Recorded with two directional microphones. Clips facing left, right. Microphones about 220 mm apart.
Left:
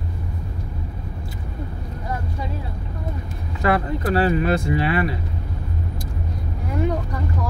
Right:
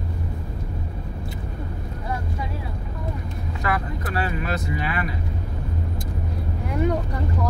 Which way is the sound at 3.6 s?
30° left (ahead or behind).